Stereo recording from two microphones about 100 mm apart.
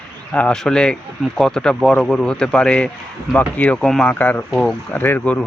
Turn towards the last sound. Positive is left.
turn(degrees=15)  # may be behind; listen again after turning